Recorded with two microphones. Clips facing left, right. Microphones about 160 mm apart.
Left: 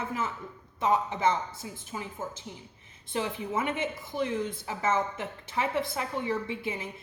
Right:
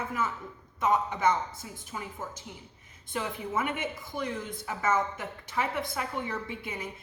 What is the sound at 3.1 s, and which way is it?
A woman's voice, 25° left (ahead or behind).